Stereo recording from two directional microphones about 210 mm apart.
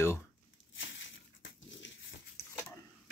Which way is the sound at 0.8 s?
60° left (ahead or behind).